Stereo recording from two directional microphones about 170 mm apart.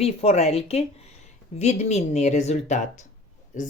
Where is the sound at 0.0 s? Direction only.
35° left (ahead or behind).